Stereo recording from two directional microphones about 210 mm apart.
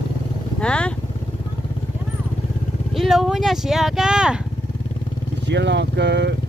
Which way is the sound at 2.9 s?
Centre (ahead or behind).